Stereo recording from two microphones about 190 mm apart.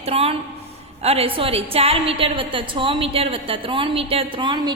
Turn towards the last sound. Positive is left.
turn(degrees=-20)  # may be behind; listen again after turning